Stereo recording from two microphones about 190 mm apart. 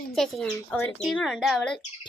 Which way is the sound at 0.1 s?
Centre (ahead or behind).